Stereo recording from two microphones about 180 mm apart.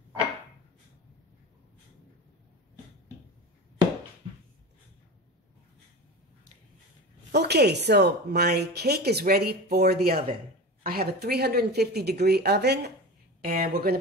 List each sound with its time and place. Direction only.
7.3 s a woman's voice: 65° right (ahead or behind)
13.4 s a woman's voice: 55° right (ahead or behind)